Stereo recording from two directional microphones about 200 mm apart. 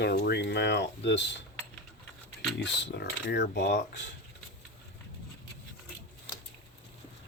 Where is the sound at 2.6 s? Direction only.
60° left (ahead or behind).